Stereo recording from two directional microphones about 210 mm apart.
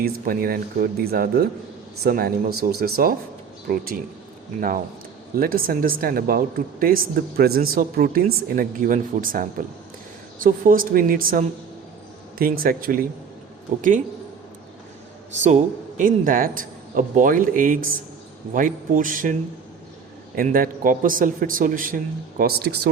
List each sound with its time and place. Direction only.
0.0 s speech: 45° right (ahead or behind)
5.3 s a man's voice: 45° right (ahead or behind)
15.4 s a man's voice: 35° right (ahead or behind)